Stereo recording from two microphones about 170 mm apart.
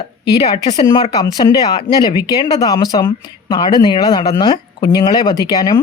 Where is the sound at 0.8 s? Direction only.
30° left (ahead or behind).